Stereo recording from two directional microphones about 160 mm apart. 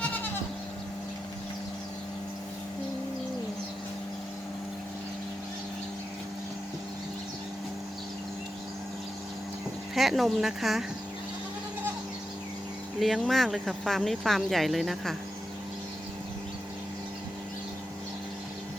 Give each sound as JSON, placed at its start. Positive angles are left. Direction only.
{"t": 9.9, "sound": "speech", "side_deg": 0}
{"t": 13.0, "sound": "speech", "side_deg": 0}